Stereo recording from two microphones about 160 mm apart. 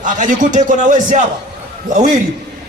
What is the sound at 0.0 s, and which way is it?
A man's voice, 50° right (ahead or behind).